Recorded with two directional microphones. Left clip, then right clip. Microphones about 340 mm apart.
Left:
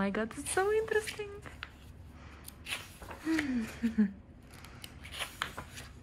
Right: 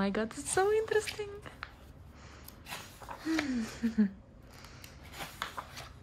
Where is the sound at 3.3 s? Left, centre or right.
Centre.